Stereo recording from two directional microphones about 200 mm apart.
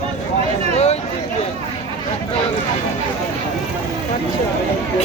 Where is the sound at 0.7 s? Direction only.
30° left (ahead or behind).